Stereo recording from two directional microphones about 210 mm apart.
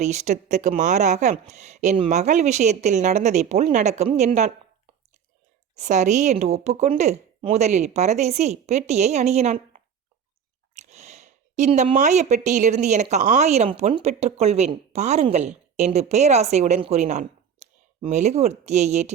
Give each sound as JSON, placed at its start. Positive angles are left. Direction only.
{"t": 0.0, "sound": "speech", "side_deg": -35}
{"t": 5.7, "sound": "speech", "side_deg": -35}